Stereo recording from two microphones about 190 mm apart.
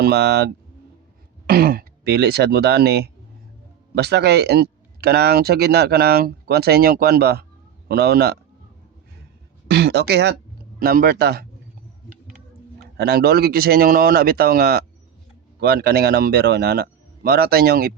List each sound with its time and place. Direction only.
0.0 s speech: 60° right (ahead or behind)
9.6 s speech: 60° right (ahead or behind)
10.8 s speech: 50° right (ahead or behind)
13.0 s speech: 55° right (ahead or behind)